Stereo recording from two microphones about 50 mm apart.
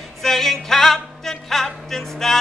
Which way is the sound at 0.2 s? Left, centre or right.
Centre.